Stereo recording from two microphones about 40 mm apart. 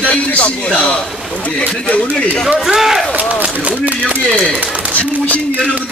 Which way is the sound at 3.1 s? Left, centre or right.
Right.